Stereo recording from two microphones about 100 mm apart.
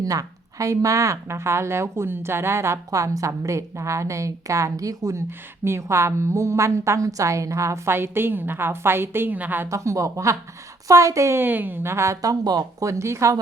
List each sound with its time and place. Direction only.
0.0 s a woman's voice: 35° right (ahead or behind); by 9.6 s 15° right (ahead or behind)
9.6 s a woman's voice: 30° right (ahead or behind)